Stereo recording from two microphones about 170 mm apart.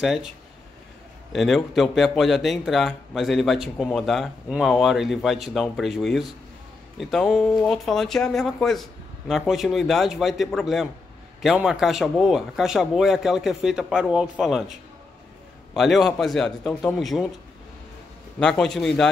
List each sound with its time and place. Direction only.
0.0 s speech: centre (ahead or behind)
1.3 s speech: centre (ahead or behind)
15.7 s speech: centre (ahead or behind)
18.4 s speech: 5° left (ahead or behind)